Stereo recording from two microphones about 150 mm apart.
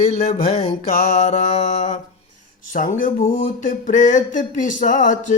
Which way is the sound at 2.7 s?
60° left (ahead or behind).